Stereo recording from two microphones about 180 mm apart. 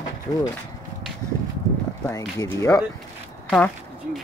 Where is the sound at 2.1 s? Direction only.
20° left (ahead or behind).